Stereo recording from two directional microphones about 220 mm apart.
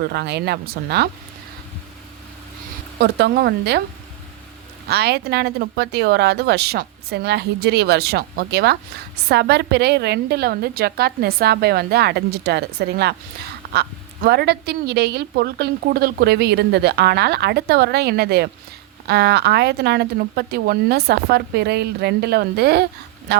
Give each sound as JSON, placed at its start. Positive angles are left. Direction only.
{"t": 0.1, "sound": "a woman's voice", "side_deg": -50}
{"t": 3.0, "sound": "a woman's voice", "side_deg": -50}
{"t": 4.9, "sound": "a woman's voice", "side_deg": -45}